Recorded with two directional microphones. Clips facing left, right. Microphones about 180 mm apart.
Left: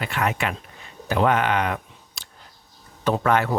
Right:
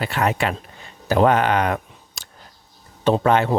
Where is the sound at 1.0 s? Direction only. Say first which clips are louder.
Right 4 dB; 35° right (ahead or behind).